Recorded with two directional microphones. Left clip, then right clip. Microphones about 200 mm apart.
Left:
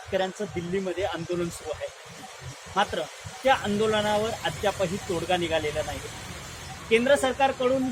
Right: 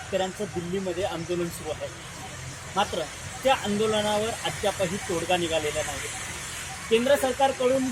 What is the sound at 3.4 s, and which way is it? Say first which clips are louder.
Speech: left 1 dB; 10° right (ahead or behind).